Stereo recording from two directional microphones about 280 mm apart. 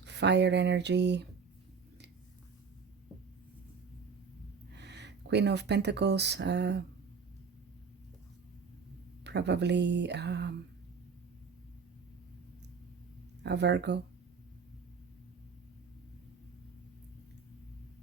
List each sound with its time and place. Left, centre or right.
0.0 s speech: right
4.7 s speech: right
9.2 s speech: right
13.4 s speech: right